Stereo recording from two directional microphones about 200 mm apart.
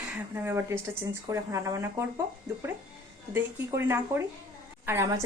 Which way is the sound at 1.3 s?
15° right (ahead or behind).